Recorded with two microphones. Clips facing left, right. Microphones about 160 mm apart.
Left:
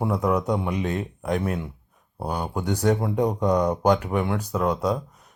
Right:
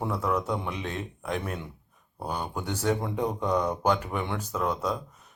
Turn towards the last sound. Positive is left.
turn(degrees=10)  # may be behind; listen again after turning